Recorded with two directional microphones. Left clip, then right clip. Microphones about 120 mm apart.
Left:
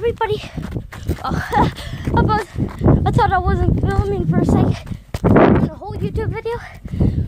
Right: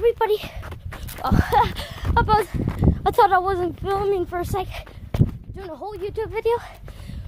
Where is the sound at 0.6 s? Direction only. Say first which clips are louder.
Left 6 dB; 60° left (ahead or behind).